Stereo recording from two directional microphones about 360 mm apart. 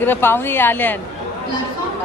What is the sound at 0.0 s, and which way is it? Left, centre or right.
Speech, centre.